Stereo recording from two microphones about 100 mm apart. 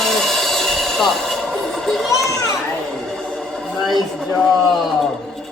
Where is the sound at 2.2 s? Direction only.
35° left (ahead or behind).